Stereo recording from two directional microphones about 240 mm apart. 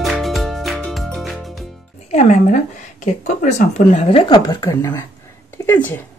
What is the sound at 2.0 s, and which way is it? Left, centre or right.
Speech, left.